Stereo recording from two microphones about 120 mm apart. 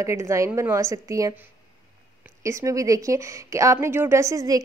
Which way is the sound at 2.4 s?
25° right (ahead or behind).